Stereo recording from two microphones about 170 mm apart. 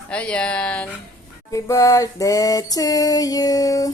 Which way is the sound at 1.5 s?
20° left (ahead or behind).